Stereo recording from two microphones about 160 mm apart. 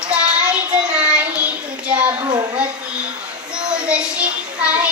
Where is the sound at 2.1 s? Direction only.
35° right (ahead or behind).